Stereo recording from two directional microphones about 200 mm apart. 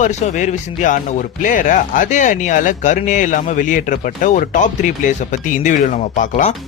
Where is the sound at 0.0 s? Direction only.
35° left (ahead or behind).